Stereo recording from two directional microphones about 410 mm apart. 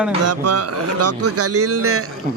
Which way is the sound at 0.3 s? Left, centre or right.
Right.